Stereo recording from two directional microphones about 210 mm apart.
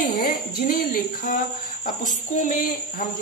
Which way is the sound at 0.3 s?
40° left (ahead or behind).